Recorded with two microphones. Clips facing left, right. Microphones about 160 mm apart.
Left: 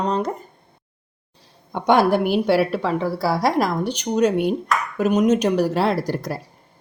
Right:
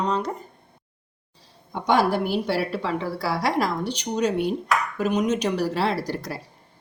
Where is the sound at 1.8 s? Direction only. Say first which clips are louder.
Left 4 dB; 60° left (ahead or behind).